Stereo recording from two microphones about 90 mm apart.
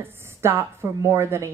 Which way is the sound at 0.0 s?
25° right (ahead or behind).